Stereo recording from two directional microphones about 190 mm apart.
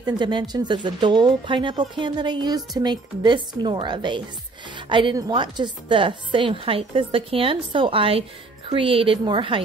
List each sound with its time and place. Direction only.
0.2 s a woman's voice: 25° right (ahead or behind)